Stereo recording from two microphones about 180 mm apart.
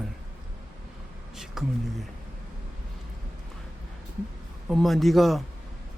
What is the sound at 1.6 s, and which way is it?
Speech, centre (ahead or behind).